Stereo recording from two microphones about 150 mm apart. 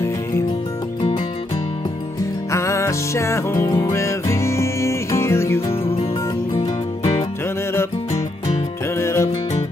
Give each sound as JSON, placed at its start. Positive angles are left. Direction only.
{"t": 2.5, "sound": "music", "side_deg": 20}
{"t": 9.0, "sound": "music", "side_deg": 20}